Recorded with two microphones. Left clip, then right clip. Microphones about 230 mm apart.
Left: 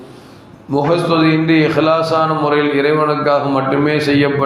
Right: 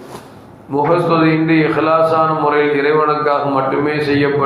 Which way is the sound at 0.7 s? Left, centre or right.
Left.